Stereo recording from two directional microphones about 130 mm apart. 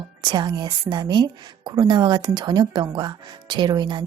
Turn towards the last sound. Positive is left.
turn(degrees=-35)  # may be behind; listen again after turning